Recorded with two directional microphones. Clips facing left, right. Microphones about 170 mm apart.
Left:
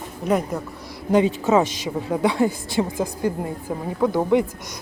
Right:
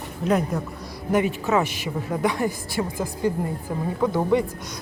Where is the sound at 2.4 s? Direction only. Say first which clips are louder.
Left 3 dB; 20° left (ahead or behind).